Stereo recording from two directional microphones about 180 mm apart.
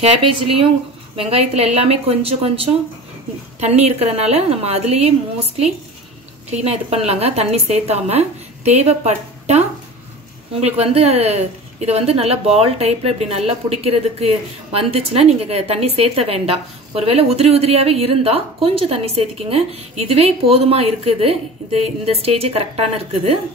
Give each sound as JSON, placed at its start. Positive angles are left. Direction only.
{"t": 0.0, "sound": "a woman's voice", "side_deg": -30}